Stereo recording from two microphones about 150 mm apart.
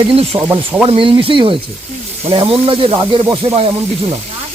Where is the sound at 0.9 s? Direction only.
35° right (ahead or behind).